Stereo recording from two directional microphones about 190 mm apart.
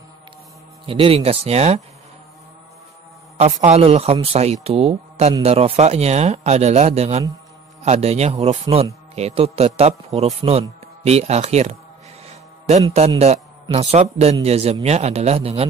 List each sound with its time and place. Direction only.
0.8 s speech: 30° right (ahead or behind)
3.3 s speech: 35° right (ahead or behind)
12.3 s a sound: 35° right (ahead or behind)
13.2 s a man's voice: 35° right (ahead or behind)